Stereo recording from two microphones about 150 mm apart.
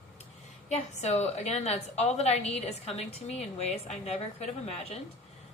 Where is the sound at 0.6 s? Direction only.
50° left (ahead or behind).